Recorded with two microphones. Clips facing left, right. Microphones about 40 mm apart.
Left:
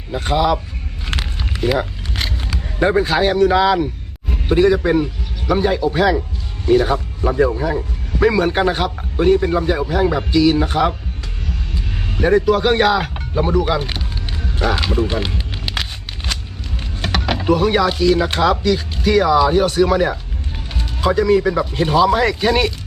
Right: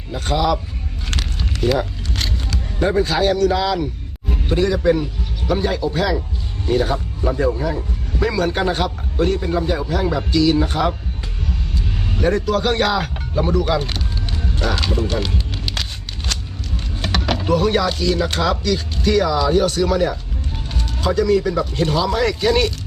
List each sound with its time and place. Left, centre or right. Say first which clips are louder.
0.1 s a man's voice: left 2 dB; centre
1.1 s a sound: left 2 dB; centre
4.4 s a man's voice: left 3 dB; centre
6.7 s a man's voice: left 5 dB; centre
7.2 s a man's voice: left 3 dB; centre
12.2 s a man's voice: left 4 dB; centre
14.5 s music: left 3 dB; centre
17.0 s a man's voice: left 1 dB; centre